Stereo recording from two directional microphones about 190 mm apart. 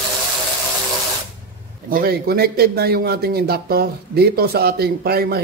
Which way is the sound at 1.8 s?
50° right (ahead or behind).